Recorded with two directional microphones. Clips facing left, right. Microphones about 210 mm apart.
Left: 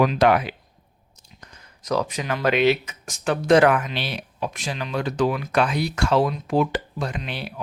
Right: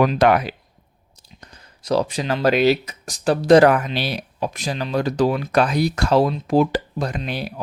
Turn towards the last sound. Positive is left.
turn(degrees=-40)  # may be behind; listen again after turning